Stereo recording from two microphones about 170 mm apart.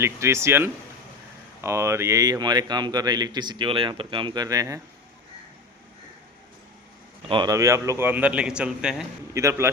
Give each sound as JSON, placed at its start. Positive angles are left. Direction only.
{"t": 0.0, "sound": "a man's voice", "side_deg": -15}
{"t": 7.3, "sound": "a man's voice", "side_deg": -25}
{"t": 9.3, "sound": "a man's voice", "side_deg": -15}